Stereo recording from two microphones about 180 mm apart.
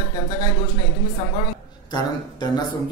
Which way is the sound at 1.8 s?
25° left (ahead or behind).